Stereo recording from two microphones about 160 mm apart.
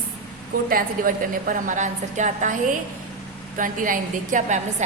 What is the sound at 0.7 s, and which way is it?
A woman's voice, 60° right (ahead or behind).